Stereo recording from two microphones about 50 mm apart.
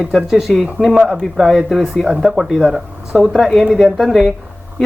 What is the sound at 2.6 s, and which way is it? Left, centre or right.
Speech, centre.